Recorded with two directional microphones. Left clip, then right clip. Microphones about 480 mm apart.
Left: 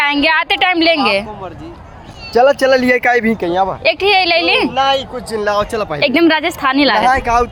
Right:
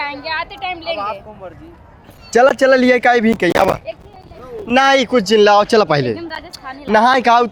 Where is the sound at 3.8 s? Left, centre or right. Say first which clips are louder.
Left 15 dB; left.